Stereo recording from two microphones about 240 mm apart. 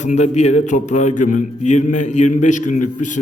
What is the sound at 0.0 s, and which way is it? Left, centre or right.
Speech, left.